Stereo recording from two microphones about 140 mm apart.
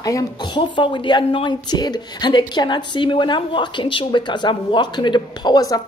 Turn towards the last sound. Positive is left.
turn(degrees=25)  # may be behind; listen again after turning